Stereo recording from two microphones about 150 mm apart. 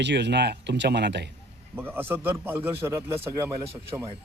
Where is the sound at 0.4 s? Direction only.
90° right.